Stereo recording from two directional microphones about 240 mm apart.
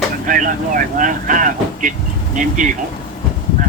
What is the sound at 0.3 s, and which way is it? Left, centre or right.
Speech, right.